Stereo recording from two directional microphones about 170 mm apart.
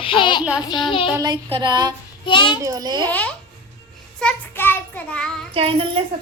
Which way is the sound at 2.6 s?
20° right (ahead or behind).